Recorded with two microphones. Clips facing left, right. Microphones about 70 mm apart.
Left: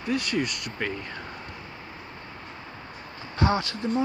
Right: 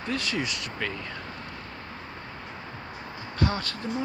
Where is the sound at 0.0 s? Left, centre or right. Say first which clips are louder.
Left 3 dB; centre.